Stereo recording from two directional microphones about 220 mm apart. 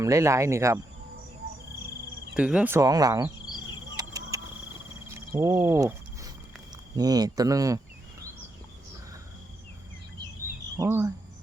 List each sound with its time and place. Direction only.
0.0 s speech: 15° right (ahead or behind)
2.3 s speech: 5° right (ahead or behind)
3.9 s cricket: 15° right (ahead or behind)
6.9 s speech: 15° right (ahead or behind)
10.8 s speech: 15° right (ahead or behind)